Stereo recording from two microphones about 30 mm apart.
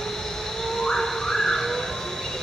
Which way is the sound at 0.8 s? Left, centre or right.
Centre.